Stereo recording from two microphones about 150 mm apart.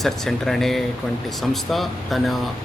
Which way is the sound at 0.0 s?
Centre (ahead or behind).